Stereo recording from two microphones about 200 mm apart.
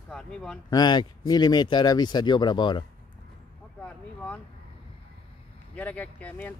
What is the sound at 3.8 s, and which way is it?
Speech, 5° left (ahead or behind).